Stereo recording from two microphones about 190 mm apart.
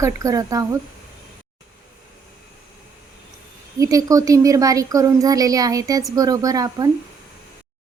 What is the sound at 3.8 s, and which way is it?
A woman's voice, 20° right (ahead or behind).